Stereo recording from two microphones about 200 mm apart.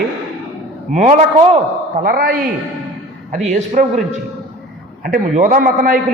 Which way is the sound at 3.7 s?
35° right (ahead or behind).